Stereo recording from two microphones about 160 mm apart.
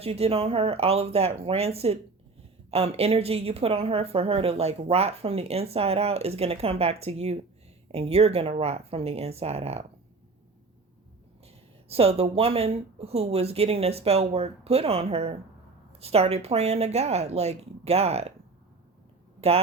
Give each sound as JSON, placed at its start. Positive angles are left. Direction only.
{"t": 0.0, "sound": "speech", "side_deg": -40}
{"t": 11.9, "sound": "speech", "side_deg": -40}
{"t": 19.4, "sound": "speech", "side_deg": -40}